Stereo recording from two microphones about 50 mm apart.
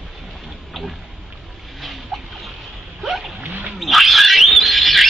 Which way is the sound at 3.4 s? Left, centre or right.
Right.